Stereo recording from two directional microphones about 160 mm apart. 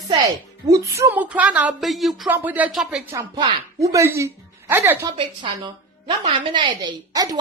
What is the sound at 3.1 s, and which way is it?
A woman's voice, 20° right (ahead or behind).